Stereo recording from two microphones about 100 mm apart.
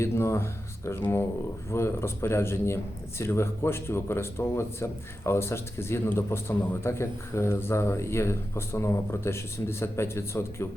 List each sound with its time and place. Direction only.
0.0 s a man's voice: 30° left (ahead or behind)